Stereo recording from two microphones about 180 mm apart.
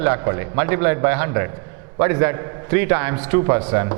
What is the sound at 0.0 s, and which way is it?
A man's voice, 15° right (ahead or behind).